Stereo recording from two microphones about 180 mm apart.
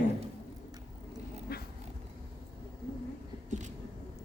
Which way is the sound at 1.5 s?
55° left (ahead or behind).